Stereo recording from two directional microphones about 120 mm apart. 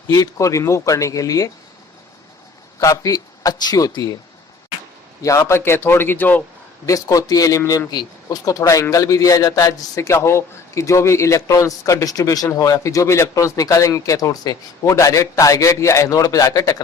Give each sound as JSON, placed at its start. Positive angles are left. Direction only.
{"t": 0.1, "sound": "a man's voice", "side_deg": 25}
{"t": 2.9, "sound": "speech", "side_deg": 30}
{"t": 5.2, "sound": "a man's voice", "side_deg": 25}
{"t": 6.8, "sound": "a man's voice", "side_deg": 30}